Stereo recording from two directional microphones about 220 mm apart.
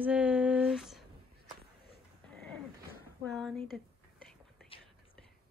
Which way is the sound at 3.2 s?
5° left (ahead or behind).